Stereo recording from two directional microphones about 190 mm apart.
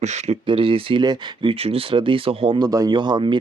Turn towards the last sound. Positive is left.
turn(degrees=-25)  # may be behind; listen again after turning